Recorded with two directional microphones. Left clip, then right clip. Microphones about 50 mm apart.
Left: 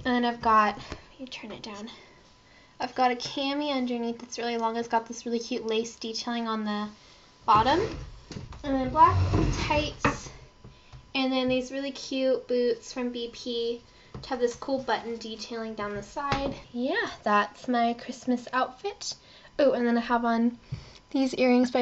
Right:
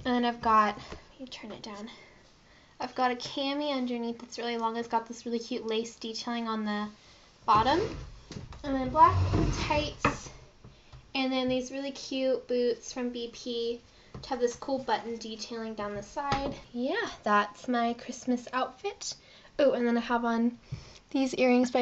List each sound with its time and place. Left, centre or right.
0.0 s a woman's voice: left
2.8 s speech: left
7.4 s speech: centre
8.5 s speech: left
9.5 s a child's voice: left
11.1 s a child's voice: centre